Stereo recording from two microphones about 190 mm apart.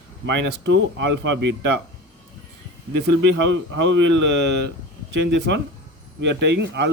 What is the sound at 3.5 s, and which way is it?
Speech, 75° right (ahead or behind).